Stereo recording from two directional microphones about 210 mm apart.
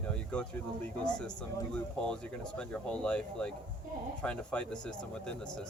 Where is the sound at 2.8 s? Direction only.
5° left (ahead or behind).